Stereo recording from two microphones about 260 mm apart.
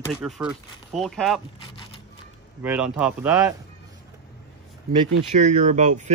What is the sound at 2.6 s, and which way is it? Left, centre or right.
Speech, centre.